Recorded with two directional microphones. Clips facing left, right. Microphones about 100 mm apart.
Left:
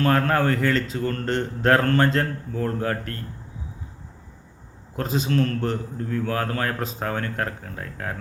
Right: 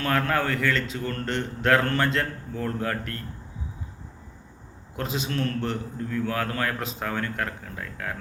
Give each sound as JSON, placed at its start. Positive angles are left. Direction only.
{"t": 0.0, "sound": "a man's voice", "side_deg": 30}
{"t": 4.9, "sound": "a man's voice", "side_deg": 40}